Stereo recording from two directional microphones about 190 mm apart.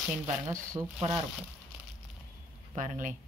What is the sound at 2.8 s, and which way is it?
Speech, 45° right (ahead or behind).